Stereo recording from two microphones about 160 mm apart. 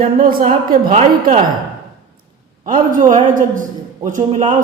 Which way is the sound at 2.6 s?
55° right (ahead or behind).